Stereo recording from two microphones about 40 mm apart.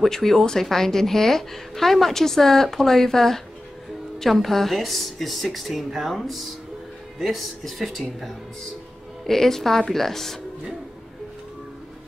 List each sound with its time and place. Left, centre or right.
0.0 s a woman's voice: centre
9.2 s a woman's voice: centre